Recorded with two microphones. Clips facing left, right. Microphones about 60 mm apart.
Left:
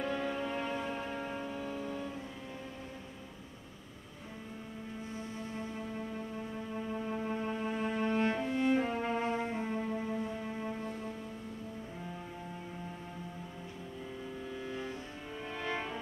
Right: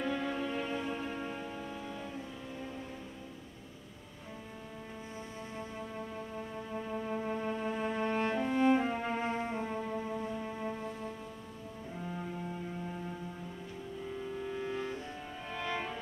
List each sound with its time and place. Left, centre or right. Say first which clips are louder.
0.1 s music: even; centre
6.7 s music: right 1 dB; centre
8.3 s music: right 2 dB; centre
14.6 s music: right 3 dB; centre